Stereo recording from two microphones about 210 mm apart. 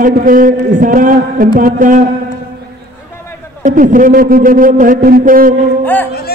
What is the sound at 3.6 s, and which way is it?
A man's voice, 40° right (ahead or behind).